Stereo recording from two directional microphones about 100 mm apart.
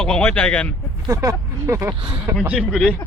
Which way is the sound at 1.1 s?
30° right (ahead or behind).